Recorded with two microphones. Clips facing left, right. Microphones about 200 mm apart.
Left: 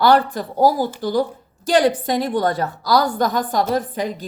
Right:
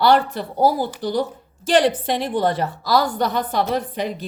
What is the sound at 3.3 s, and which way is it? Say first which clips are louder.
Speech: left 2 dB; 45° left (ahead or behind).